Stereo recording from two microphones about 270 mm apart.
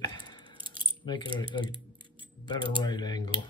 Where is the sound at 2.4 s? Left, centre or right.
Centre.